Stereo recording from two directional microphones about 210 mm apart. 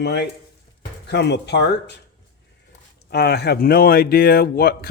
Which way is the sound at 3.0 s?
50° left (ahead or behind).